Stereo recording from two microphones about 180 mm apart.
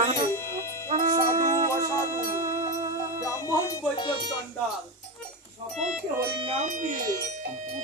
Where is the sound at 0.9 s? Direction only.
45° right (ahead or behind).